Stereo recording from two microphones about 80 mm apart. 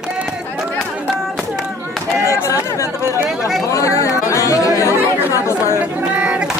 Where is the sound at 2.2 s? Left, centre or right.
Left.